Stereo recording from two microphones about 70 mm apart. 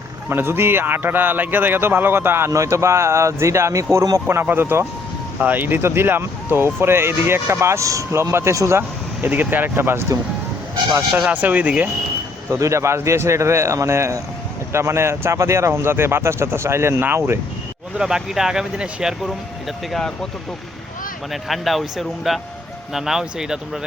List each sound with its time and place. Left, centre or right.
0.3 s speech: right
2.5 s speech: right
4.4 s speech: right
9.2 s speech: right
11.3 s speech: right
12.5 s speech: right
17.9 s speech: centre
19.9 s speech: centre
21.4 s speech: centre